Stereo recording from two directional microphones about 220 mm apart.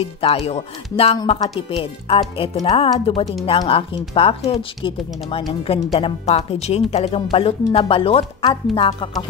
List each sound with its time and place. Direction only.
0.0 s speech: 25° left (ahead or behind)